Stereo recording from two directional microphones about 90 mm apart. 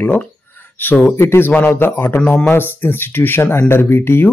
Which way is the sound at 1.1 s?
30° left (ahead or behind).